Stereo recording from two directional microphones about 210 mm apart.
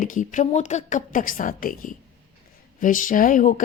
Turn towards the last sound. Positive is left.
turn(degrees=40)  # may be behind; listen again after turning